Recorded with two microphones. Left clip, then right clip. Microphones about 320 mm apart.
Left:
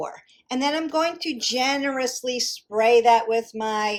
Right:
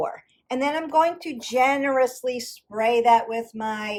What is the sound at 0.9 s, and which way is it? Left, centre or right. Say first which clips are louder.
A woman's voice: right 3 dB; centre.